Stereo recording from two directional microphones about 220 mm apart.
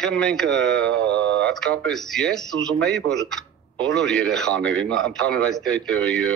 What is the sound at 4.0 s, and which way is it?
A man's voice, 5° left (ahead or behind).